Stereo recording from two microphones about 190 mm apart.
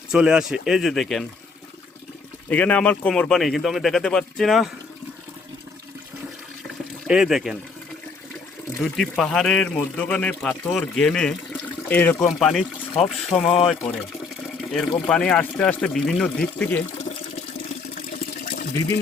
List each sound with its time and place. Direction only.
0.1 s speech: 5° right (ahead or behind)
2.5 s speech: 5° left (ahead or behind)
7.1 s speech: centre (ahead or behind)
8.8 s speech: centre (ahead or behind)
13.4 s speech: 30° left (ahead or behind)
14.6 s speech: centre (ahead or behind)
18.3 s water: 45° left (ahead or behind)